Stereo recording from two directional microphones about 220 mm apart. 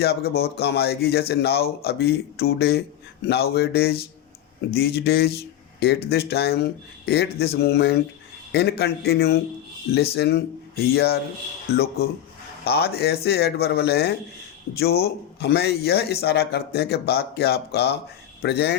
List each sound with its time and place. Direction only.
0.0 s speech: 45° left (ahead or behind)